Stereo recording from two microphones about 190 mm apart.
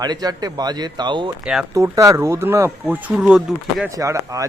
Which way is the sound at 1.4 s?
5° right (ahead or behind).